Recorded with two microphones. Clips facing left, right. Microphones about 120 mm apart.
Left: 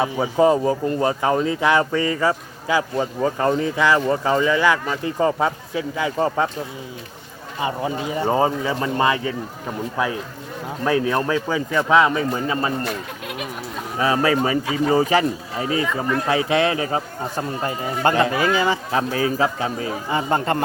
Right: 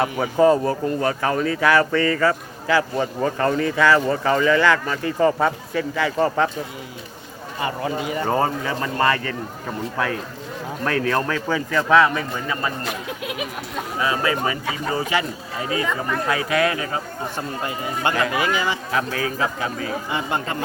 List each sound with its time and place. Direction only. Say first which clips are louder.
0.2 s speech: right 1 dB; 15° left (ahead or behind)
7.6 s a man's voice: left 1 dB; 15° left (ahead or behind)
14.0 s speech: left 4 dB; 35° left (ahead or behind)
16.2 s speech: left 1 dB; 25° left (ahead or behind)